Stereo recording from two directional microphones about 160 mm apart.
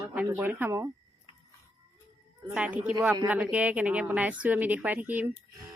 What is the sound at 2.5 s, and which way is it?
A woman's voice, 10° right (ahead or behind).